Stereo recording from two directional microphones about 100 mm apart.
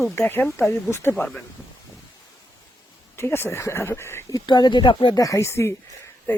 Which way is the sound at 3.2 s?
25° left (ahead or behind).